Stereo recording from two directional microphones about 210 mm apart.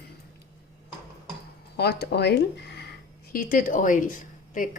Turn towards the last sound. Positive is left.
turn(degrees=40)  # may be behind; listen again after turning